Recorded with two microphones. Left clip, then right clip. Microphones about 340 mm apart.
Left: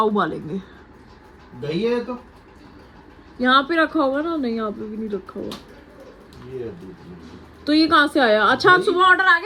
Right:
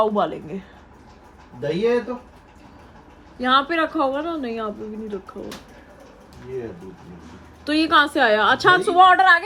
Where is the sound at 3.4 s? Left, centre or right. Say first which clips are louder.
Left 2 dB; centre.